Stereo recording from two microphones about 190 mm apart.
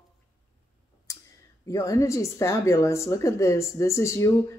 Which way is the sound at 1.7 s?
15° left (ahead or behind).